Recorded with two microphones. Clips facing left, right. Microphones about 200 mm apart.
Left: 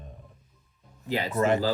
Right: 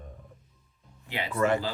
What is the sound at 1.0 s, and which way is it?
Speech, 40° left (ahead or behind).